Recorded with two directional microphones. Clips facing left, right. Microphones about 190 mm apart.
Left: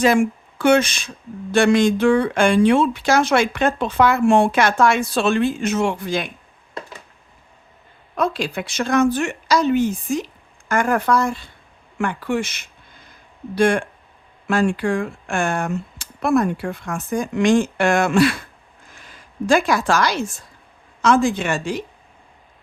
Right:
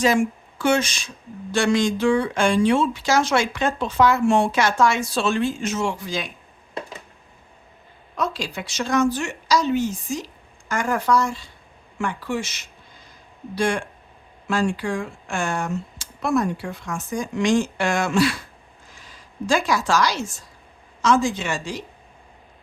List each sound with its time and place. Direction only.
0.0 s speech: 60° left (ahead or behind)
8.1 s speech: 55° left (ahead or behind)